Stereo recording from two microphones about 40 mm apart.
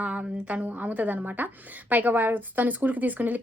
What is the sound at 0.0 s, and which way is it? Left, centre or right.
A woman's voice, right.